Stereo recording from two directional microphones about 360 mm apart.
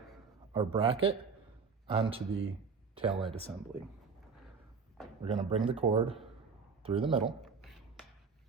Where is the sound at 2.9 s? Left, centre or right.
Centre.